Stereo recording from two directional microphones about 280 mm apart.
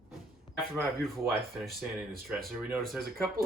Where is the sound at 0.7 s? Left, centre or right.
Centre.